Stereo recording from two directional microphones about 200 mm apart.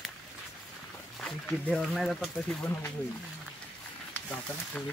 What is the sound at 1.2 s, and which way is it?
Speech, 5° left (ahead or behind).